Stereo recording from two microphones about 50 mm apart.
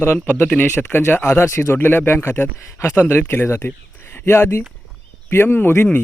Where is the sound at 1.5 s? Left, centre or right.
Left.